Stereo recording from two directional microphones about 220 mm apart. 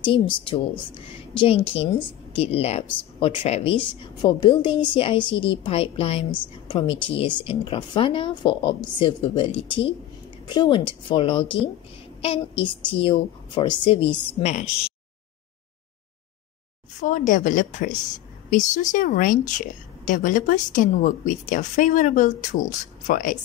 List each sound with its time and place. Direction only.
0.5 s speech: 25° left (ahead or behind)
17.0 s a woman's voice: 35° left (ahead or behind)